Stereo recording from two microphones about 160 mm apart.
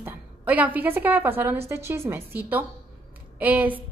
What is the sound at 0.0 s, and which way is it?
A woman's voice, 10° right (ahead or behind).